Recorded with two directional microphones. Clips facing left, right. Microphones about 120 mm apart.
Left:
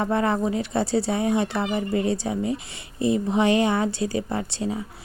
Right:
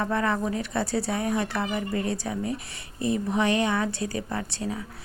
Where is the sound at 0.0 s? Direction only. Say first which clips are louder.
Left 3 dB; 30° left (ahead or behind).